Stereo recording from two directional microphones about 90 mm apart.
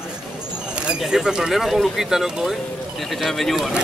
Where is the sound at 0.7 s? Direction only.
10° right (ahead or behind).